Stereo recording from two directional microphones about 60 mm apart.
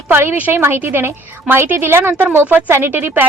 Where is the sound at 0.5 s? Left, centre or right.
Right.